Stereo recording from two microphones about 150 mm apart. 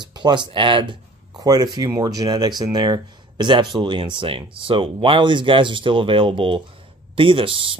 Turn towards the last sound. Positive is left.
turn(degrees=-35)  # may be behind; listen again after turning